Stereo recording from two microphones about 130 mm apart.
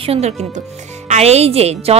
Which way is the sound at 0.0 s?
50° right (ahead or behind).